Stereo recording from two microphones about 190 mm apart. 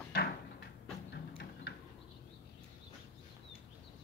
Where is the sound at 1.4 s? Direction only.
60° left (ahead or behind).